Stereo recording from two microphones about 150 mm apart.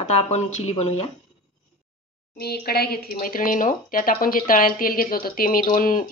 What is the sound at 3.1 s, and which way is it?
Speech, 65° left (ahead or behind).